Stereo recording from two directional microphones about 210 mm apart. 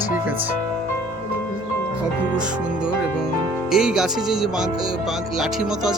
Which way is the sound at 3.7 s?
5° right (ahead or behind).